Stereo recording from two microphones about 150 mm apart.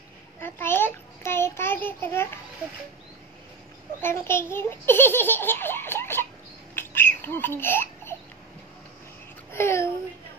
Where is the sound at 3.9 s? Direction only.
15° left (ahead or behind).